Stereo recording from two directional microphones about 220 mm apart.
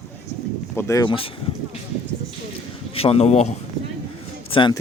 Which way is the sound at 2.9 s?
25° left (ahead or behind).